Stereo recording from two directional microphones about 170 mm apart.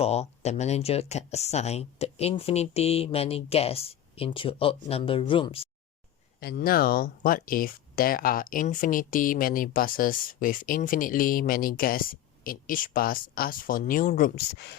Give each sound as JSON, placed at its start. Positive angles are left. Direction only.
{"t": 0.0, "sound": "speech", "side_deg": 40}
{"t": 6.4, "sound": "speech", "side_deg": 60}